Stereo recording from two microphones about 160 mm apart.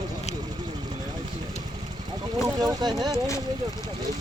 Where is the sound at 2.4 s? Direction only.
25° right (ahead or behind).